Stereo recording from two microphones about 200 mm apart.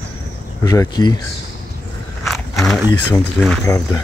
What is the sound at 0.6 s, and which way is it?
Speech, 20° left (ahead or behind).